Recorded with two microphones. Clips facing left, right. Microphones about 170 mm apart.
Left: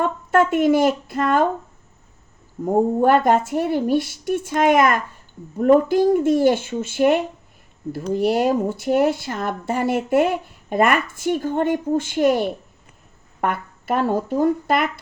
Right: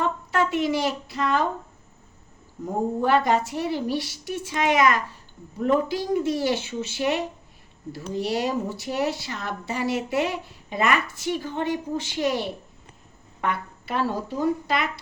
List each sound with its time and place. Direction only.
0.0 s speech: 50° left (ahead or behind)
2.6 s speech: 50° left (ahead or behind)